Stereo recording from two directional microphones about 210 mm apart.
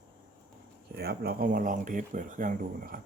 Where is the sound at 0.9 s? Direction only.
50° right (ahead or behind).